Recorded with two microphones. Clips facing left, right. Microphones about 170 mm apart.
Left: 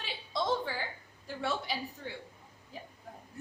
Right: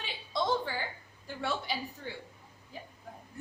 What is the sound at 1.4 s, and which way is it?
A woman's voice, centre (ahead or behind).